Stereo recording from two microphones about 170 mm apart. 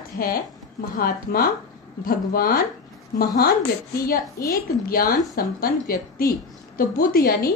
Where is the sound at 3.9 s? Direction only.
60° left (ahead or behind).